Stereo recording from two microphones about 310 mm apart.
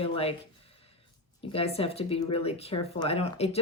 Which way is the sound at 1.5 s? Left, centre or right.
Centre.